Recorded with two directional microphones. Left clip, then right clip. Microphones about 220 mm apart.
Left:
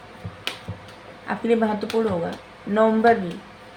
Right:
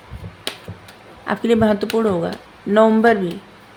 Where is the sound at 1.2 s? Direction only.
50° right (ahead or behind).